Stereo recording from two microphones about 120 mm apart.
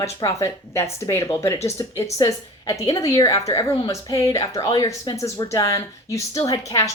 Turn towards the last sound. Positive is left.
turn(degrees=25)  # may be behind; listen again after turning